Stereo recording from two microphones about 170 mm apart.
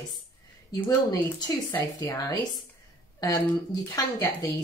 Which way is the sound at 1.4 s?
20° left (ahead or behind).